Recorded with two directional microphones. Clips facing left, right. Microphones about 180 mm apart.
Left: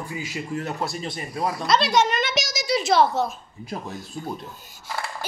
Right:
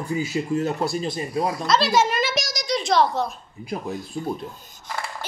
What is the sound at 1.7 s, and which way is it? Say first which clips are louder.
Speech: even; centre (ahead or behind).